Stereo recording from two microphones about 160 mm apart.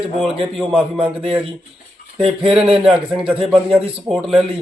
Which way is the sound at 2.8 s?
5° right (ahead or behind).